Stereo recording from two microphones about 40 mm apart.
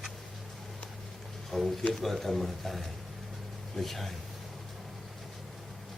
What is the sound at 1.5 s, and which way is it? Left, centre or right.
A man's voice, centre.